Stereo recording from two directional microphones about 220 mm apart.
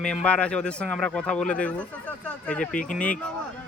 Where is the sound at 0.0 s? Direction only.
5° left (ahead or behind).